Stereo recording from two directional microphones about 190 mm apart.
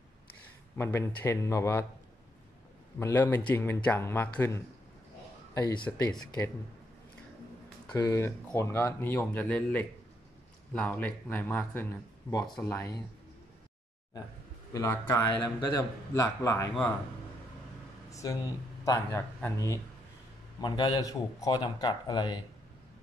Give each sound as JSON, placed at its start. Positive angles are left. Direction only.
{"t": 0.7, "sound": "speech", "side_deg": 15}
{"t": 3.0, "sound": "a man's voice", "side_deg": 10}
{"t": 7.9, "sound": "speech", "side_deg": 15}
{"t": 14.7, "sound": "speech", "side_deg": 15}
{"t": 18.2, "sound": "a man's voice", "side_deg": 15}